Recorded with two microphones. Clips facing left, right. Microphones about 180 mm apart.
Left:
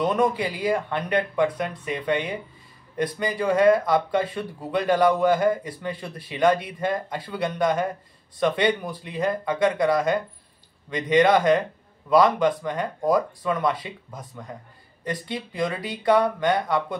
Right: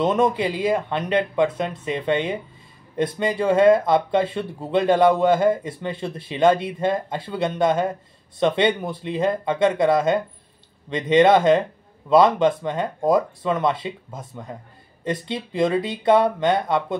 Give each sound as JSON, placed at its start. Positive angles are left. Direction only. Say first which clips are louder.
{"t": 0.0, "sound": "speech", "louder": "right 3 dB", "side_deg": -25}